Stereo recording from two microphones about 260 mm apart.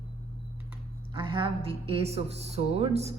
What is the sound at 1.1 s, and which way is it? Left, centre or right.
A woman's voice, centre.